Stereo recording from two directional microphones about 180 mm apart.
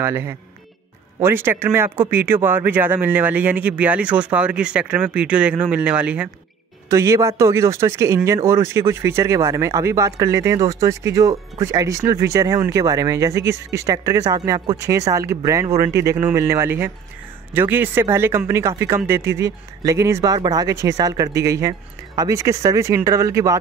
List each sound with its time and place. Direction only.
0.0 s speech: 15° right (ahead or behind)